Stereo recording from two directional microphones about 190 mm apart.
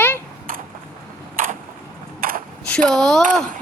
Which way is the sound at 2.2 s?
50° right (ahead or behind).